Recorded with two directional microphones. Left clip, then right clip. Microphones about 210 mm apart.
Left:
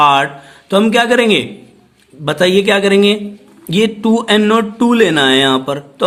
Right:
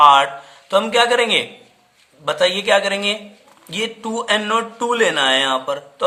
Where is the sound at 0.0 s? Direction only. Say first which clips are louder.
Even; 30° left (ahead or behind).